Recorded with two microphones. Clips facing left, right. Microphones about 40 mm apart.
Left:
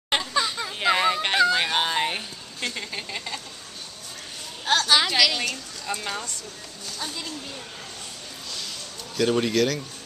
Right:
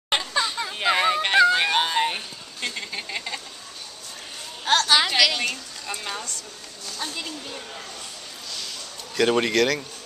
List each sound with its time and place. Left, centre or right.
0.1 s a sound: centre
4.6 s a woman's voice: centre
7.0 s speech: centre
9.2 s speech: right